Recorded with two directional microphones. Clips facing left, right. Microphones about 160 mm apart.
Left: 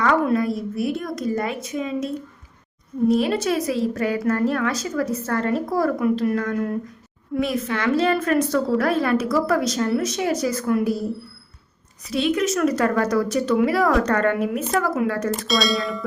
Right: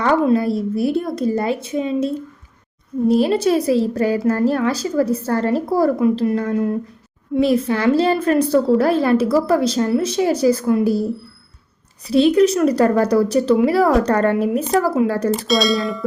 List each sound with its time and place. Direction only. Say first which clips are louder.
0.0 s a woman's voice: right 4 dB; 25° right (ahead or behind)
12.0 s a woman's voice: right 8 dB; 35° right (ahead or behind)
15.4 s a sound: right 3 dB; centre (ahead or behind)